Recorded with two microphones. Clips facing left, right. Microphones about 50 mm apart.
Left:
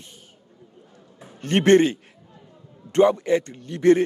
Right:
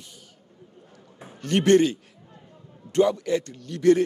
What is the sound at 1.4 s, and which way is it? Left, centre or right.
A man's voice, left.